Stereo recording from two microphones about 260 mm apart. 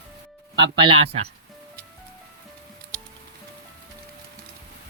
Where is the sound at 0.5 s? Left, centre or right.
Centre.